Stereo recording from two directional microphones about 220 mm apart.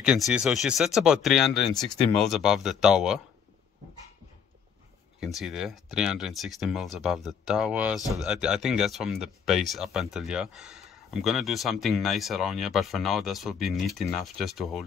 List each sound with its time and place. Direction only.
0.0 s speech: 5° right (ahead or behind)
5.2 s speech: centre (ahead or behind)